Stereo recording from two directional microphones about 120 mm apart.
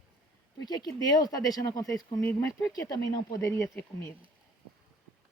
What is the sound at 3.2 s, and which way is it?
Speech, 40° left (ahead or behind).